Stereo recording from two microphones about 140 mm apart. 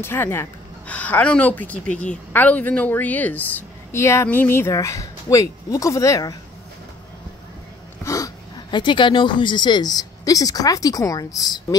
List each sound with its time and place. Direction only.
0.0 s speech: 15° left (ahead or behind)
8.0 s speech: 25° left (ahead or behind)